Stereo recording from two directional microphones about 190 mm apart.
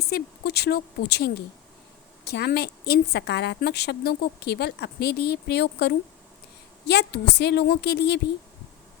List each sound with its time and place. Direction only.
0.0 s a woman's voice: 55° left (ahead or behind)